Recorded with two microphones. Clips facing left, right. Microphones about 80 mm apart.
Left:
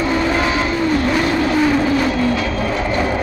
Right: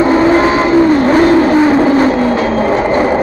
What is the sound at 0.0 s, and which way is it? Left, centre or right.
Vehicle, right.